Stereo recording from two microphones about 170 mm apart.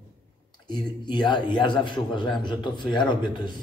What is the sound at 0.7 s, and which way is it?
A man's voice, 25° left (ahead or behind).